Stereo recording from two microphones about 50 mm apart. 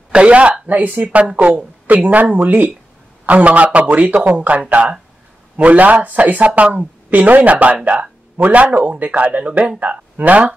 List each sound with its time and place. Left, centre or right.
0.1 s a woman's voice: right